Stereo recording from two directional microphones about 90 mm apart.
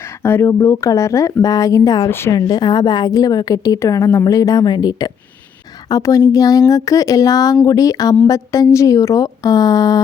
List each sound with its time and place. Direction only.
0.2 s speech: 25° left (ahead or behind); by 2.0 s 45° left (ahead or behind)
2.0 s speech: 25° left (ahead or behind)
2.3 s a woman's voice: 50° left (ahead or behind)